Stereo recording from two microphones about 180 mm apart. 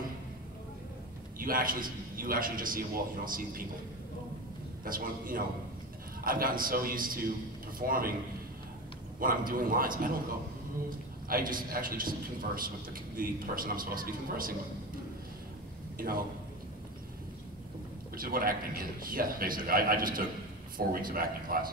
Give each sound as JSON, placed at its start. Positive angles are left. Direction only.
{"t": 1.4, "sound": "a man's voice", "side_deg": -50}
{"t": 4.8, "sound": "a man's voice", "side_deg": -50}
{"t": 9.2, "sound": "a man's voice", "side_deg": -50}
{"t": 11.2, "sound": "a man's voice", "side_deg": -50}
{"t": 16.0, "sound": "a man's voice", "side_deg": -55}
{"t": 18.1, "sound": "a man's voice", "side_deg": -55}